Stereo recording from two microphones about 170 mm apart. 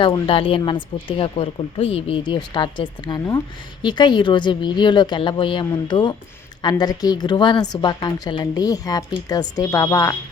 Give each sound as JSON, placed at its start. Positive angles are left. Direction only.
{"t": 0.0, "sound": "a woman's voice", "side_deg": 30}